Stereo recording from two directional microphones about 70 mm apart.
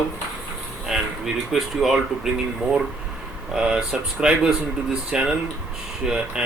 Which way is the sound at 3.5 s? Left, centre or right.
Centre.